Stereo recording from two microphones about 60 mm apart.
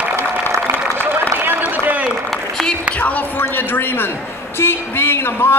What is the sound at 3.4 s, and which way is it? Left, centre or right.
A man's voice, left.